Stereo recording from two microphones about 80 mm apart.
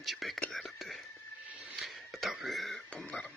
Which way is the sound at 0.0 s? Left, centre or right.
Centre.